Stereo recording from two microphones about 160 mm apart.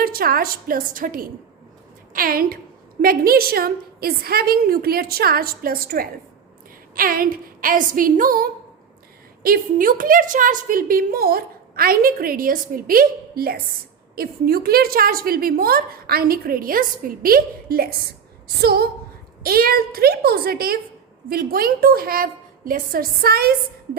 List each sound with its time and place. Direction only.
0.0 s a woman's voice: 70° right (ahead or behind)
19.4 s a woman's voice: 65° right (ahead or behind)